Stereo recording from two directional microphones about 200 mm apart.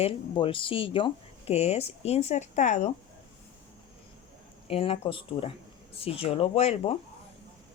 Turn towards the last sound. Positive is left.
turn(degrees=30)  # may be behind; listen again after turning